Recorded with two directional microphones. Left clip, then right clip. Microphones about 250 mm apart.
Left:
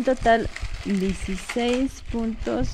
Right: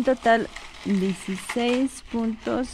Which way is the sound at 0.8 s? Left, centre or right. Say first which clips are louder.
Right 1 dB; centre.